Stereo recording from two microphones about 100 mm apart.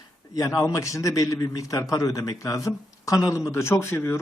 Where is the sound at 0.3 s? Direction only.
35° left (ahead or behind).